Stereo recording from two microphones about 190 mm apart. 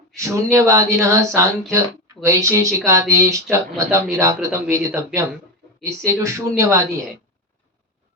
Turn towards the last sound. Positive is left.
turn(degrees=-15)  # may be behind; listen again after turning